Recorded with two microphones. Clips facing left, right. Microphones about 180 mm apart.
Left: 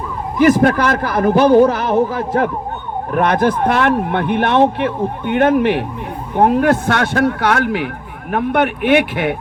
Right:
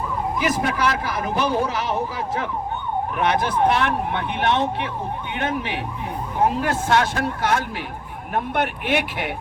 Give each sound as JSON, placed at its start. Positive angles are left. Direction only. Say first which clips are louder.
{"t": 0.3, "sound": "speech", "louder": "left 13 dB", "side_deg": 60}